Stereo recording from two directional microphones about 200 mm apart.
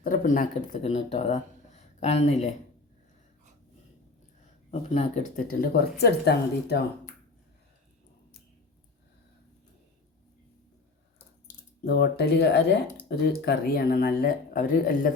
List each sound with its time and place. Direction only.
0.0 s speech: 40° left (ahead or behind)
4.7 s speech: 35° left (ahead or behind)
5.5 s speech: 50° left (ahead or behind)
11.9 s speech: 55° left (ahead or behind)